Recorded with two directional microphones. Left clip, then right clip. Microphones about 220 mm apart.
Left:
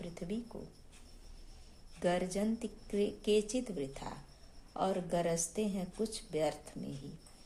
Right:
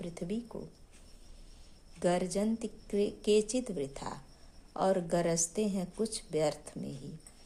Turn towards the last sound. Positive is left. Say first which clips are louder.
# right 3 dB
turn(degrees=-25)  # may be behind; listen again after turning